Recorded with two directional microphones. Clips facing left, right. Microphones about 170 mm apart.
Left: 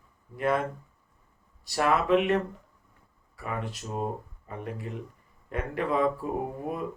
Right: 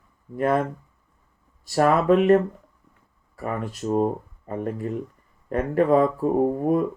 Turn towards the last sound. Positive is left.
turn(degrees=-40)  # may be behind; listen again after turning